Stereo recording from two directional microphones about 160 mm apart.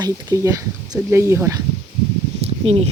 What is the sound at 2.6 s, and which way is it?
Speech, 35° right (ahead or behind).